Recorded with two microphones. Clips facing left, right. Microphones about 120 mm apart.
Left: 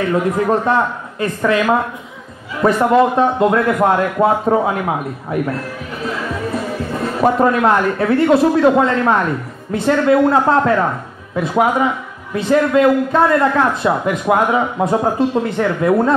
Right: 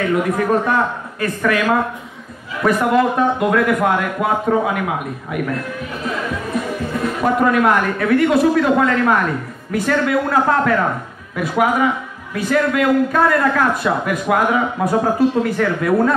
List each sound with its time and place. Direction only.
0.1 s a man's voice: 25° left (ahead or behind)
7.2 s a man's voice: 30° left (ahead or behind)